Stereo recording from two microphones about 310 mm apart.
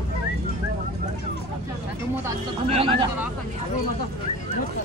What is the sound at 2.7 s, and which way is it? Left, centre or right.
Speech, centre.